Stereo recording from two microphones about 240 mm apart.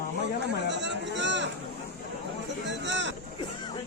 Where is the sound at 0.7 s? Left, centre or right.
Right.